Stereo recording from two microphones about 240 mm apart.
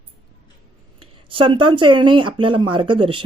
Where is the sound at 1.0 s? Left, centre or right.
Right.